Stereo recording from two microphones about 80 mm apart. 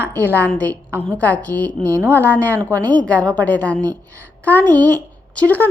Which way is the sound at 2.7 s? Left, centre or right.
Centre.